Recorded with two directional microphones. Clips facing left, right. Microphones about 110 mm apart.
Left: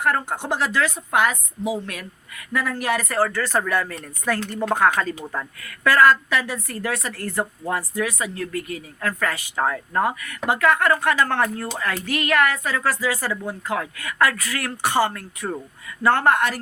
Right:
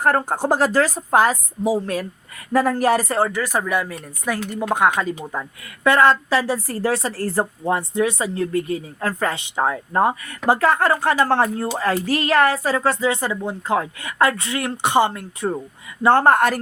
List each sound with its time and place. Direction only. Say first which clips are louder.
0.0 s a woman's voice: right 4 dB; 40° right (ahead or behind); by 15.6 s 20° right (ahead or behind)
16.0 s a woman's voice: right 4 dB; 35° right (ahead or behind)